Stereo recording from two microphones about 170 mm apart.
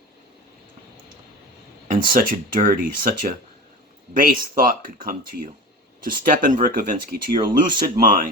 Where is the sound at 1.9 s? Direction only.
55° right (ahead or behind).